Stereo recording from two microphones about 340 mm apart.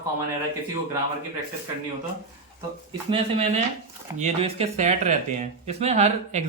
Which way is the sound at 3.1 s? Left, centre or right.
Centre.